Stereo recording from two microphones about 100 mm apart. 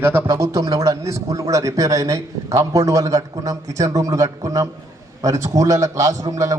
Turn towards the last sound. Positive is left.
turn(degrees=-35)  # may be behind; listen again after turning